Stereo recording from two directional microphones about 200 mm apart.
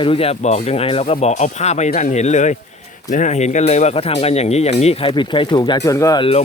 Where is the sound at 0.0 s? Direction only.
30° left (ahead or behind).